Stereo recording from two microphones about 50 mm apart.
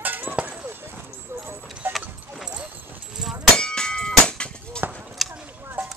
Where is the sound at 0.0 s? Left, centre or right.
Right.